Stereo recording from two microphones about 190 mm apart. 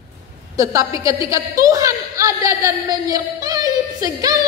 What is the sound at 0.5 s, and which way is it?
A woman's voice, 15° right (ahead or behind).